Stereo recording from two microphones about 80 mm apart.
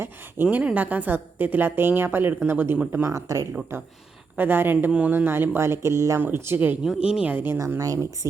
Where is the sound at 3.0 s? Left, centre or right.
Right.